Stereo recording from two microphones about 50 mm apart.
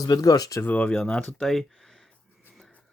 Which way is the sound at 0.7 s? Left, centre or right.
Left.